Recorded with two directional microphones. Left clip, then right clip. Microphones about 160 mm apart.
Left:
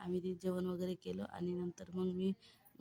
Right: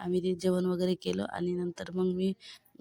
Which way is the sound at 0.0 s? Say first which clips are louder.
Right 11 dB; 35° right (ahead or behind).